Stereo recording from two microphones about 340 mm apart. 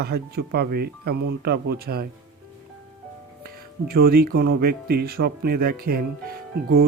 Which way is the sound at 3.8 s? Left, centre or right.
Right.